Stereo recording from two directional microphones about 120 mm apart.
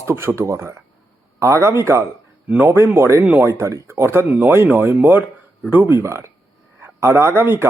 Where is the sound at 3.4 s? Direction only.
25° right (ahead or behind).